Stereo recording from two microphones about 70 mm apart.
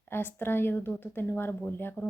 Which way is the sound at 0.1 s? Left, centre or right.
Left.